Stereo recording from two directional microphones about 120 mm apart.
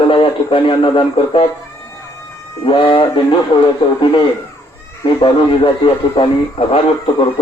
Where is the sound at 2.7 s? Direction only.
45° left (ahead or behind).